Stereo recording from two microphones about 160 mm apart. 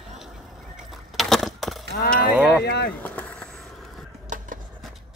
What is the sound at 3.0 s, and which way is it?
Vehicle, 10° left (ahead or behind).